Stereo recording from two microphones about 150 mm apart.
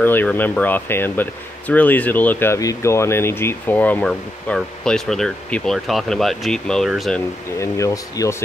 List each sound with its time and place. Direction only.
0.0 s speech: 10° left (ahead or behind)
7.5 s speech: 20° left (ahead or behind)